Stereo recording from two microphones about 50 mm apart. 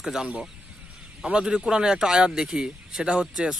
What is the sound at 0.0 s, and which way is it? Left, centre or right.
Speech, centre.